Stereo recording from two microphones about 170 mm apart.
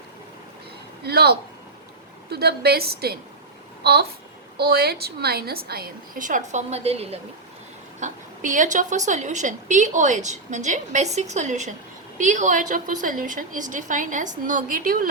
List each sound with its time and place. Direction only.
1.0 s a woman's voice: 70° right (ahead or behind)
4.5 s a woman's voice: 65° right (ahead or behind); by 7.2 s 35° right (ahead or behind)
7.9 s a woman's voice: 50° right (ahead or behind)